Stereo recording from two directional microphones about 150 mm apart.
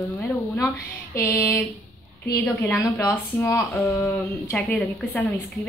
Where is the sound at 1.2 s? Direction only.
20° left (ahead or behind).